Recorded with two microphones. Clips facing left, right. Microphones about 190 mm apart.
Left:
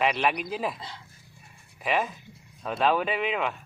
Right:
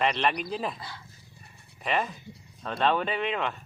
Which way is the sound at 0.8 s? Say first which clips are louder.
Left 1 dB; 20° left (ahead or behind).